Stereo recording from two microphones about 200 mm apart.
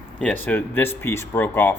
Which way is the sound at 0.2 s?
5° left (ahead or behind).